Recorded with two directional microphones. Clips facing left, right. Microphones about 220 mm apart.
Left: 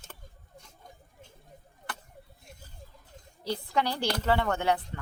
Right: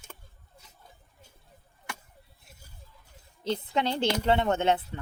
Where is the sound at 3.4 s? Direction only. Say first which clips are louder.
Right 1 dB; 20° right (ahead or behind).